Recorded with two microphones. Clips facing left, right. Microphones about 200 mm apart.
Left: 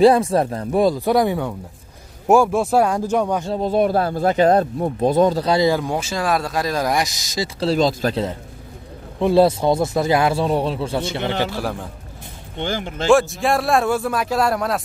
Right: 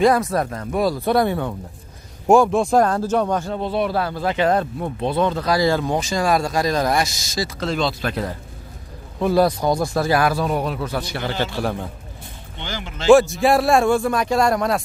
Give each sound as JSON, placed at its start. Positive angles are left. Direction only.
{"t": 0.0, "sound": "speech", "side_deg": 30}
{"t": 0.9, "sound": "a man's voice", "side_deg": 15}
{"t": 3.6, "sound": "speech", "side_deg": 45}
{"t": 5.6, "sound": "a man's voice", "side_deg": 15}
{"t": 7.6, "sound": "speech", "side_deg": 40}
{"t": 9.2, "sound": "speech", "side_deg": 25}
{"t": 11.4, "sound": "a man's voice", "side_deg": 5}
{"t": 12.5, "sound": "speech", "side_deg": 50}
{"t": 13.1, "sound": "a man's voice", "side_deg": 0}